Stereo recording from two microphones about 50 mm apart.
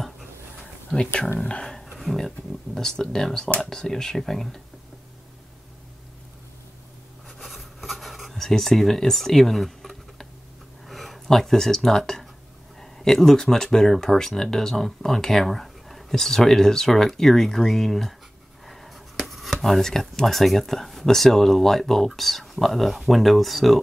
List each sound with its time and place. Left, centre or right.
0.9 s speech: centre
1.6 s a sound: centre
2.0 s speech: centre
7.2 s writing: centre
10.9 s a sound: centre
13.0 s speech: centre